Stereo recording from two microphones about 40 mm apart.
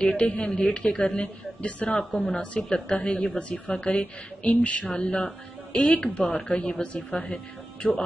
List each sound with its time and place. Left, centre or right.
0.0 s a woman's voice: left
5.7 s speech: centre
6.1 s a woman's voice: left